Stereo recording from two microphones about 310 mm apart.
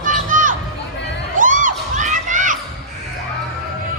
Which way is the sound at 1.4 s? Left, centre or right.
Right.